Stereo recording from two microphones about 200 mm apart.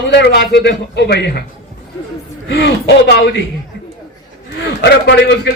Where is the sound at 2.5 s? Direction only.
55° left (ahead or behind).